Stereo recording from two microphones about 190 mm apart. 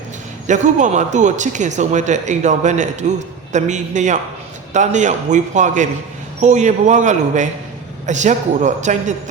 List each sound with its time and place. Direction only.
0.4 s speech: 40° right (ahead or behind)